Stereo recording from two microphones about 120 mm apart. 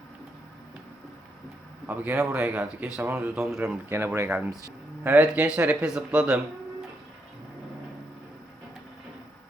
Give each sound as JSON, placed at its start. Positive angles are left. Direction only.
{"t": 1.9, "sound": "speech", "side_deg": -15}
{"t": 3.3, "sound": "speech", "side_deg": -5}
{"t": 3.8, "sound": "speech", "side_deg": -20}
{"t": 4.3, "sound": "speech", "side_deg": -10}